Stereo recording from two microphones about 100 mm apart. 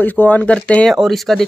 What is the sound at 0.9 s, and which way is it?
Speech, centre (ahead or behind).